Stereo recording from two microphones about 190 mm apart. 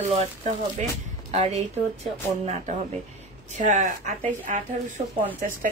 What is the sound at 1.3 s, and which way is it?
A woman's voice, 35° right (ahead or behind).